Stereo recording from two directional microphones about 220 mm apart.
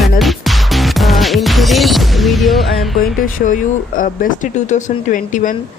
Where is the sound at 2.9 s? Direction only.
35° left (ahead or behind).